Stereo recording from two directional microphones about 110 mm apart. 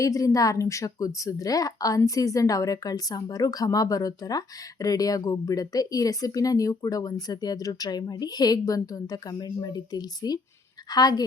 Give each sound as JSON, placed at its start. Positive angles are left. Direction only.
{"t": 0.0, "sound": "a woman's voice", "side_deg": 30}